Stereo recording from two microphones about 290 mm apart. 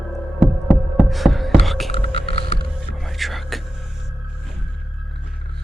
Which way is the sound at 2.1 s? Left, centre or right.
Centre.